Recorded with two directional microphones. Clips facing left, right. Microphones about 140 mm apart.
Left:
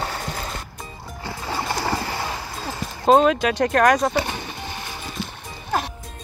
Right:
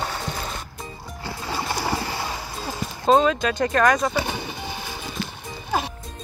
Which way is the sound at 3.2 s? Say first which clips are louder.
Left 3 dB; 60° left (ahead or behind).